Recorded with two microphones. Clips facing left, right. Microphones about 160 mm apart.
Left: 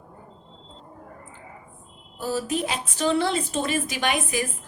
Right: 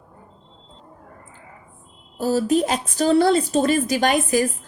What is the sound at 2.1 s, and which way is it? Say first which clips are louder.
Speech: right 8 dB; 40° right (ahead or behind).